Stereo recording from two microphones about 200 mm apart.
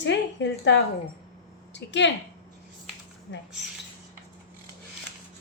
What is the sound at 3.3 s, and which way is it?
Speech, 65° left (ahead or behind).